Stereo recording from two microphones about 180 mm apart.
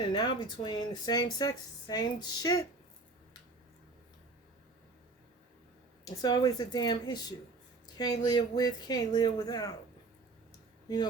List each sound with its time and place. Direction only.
0.0 s speech: 25° left (ahead or behind)
6.2 s speech: 20° left (ahead or behind)
10.8 s speech: 25° left (ahead or behind)